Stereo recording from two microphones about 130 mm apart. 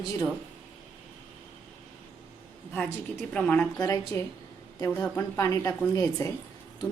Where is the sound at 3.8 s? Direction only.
25° left (ahead or behind).